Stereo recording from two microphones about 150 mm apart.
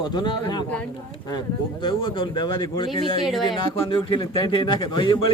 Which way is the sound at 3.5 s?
35° left (ahead or behind).